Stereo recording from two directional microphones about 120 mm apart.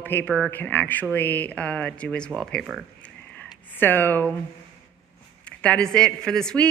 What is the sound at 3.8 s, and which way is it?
Speech, 15° left (ahead or behind).